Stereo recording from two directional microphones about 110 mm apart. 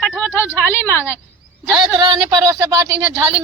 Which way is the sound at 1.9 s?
45° right (ahead or behind).